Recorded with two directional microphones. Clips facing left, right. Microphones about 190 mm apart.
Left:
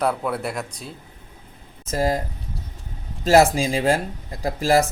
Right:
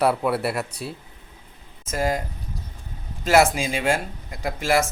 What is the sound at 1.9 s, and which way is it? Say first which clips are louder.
Speech: left 2 dB; 35° left (ahead or behind).